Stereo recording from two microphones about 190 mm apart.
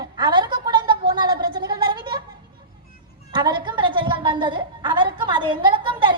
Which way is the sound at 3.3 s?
25° right (ahead or behind).